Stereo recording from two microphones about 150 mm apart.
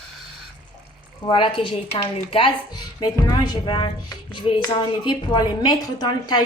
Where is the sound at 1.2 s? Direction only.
30° left (ahead or behind).